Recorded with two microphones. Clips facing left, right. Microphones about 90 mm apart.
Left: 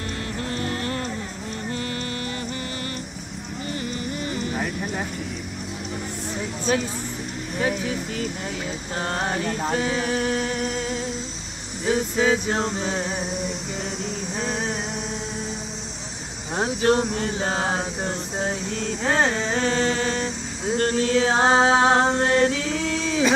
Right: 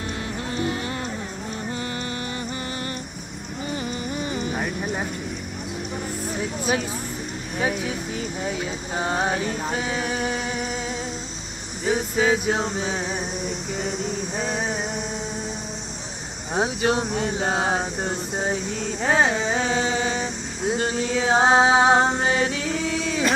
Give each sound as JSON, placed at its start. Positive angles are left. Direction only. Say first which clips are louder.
{"t": 0.5, "sound": "music", "louder": "right 1 dB", "side_deg": -15}
{"t": 6.6, "sound": "speech", "louder": "left 3 dB", "side_deg": -10}
{"t": 11.8, "sound": "male singing", "louder": "even", "side_deg": 0}
{"t": 16.5, "sound": "speech", "louder": "left 2 dB", "side_deg": -5}